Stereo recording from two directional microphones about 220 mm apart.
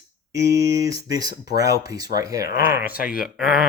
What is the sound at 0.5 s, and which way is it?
Speech, 15° right (ahead or behind).